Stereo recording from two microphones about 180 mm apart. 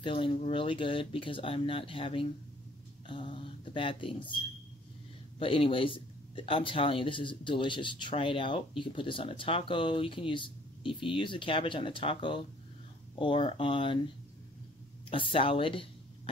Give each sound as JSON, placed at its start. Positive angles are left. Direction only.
{"t": 0.0, "sound": "speech", "side_deg": 30}
{"t": 5.4, "sound": "speech", "side_deg": 30}
{"t": 15.0, "sound": "speech", "side_deg": 30}